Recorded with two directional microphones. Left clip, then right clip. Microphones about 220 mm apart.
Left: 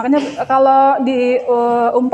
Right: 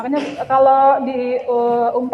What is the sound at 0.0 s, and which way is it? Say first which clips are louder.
A woman's voice: left 5 dB; 50° left (ahead or behind).